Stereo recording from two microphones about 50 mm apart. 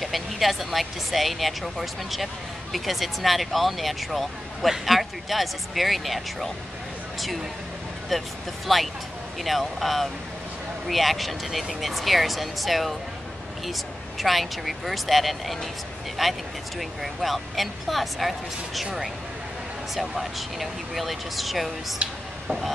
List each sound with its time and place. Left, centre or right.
0.0 s speech: centre
8.1 s speech: centre
20.0 s speech: centre